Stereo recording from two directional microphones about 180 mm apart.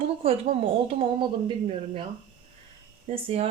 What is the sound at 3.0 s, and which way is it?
Speech, 35° right (ahead or behind).